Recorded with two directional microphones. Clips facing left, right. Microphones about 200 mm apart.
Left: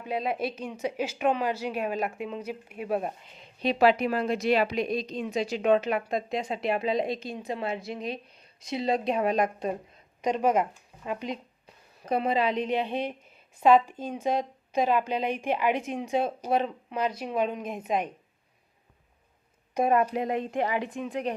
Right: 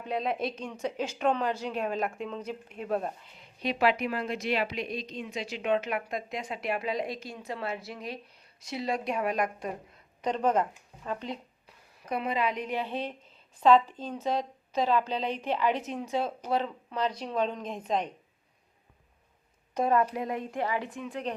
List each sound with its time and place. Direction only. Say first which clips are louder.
0.0 s a woman's voice: left 1 dB; 5° left (ahead or behind)
12.0 s a woman's voice: left 4 dB; 30° left (ahead or behind); by 18.1 s 10° left (ahead or behind)
19.7 s a woman's voice: left 2 dB; 15° left (ahead or behind)